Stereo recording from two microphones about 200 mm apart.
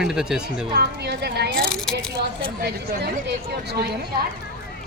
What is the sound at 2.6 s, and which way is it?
Speech, 55° right (ahead or behind).